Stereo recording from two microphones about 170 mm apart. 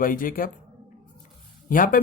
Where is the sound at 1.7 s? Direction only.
55° left (ahead or behind).